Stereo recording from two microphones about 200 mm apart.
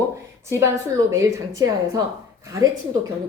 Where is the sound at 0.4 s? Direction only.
15° right (ahead or behind).